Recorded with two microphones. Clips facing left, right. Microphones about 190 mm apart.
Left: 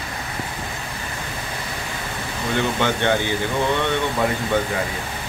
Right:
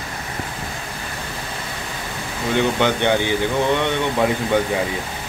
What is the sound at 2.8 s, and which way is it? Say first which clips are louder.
Speech: right 2 dB; 15° right (ahead or behind).